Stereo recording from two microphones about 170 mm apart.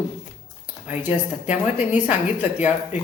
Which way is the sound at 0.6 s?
10° right (ahead or behind).